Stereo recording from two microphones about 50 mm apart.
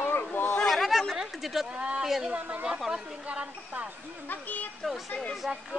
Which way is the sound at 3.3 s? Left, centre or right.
Right.